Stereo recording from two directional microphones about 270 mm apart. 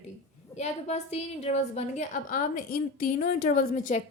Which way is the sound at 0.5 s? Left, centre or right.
Left.